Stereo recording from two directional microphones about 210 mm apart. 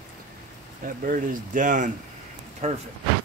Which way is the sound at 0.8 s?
40° right (ahead or behind).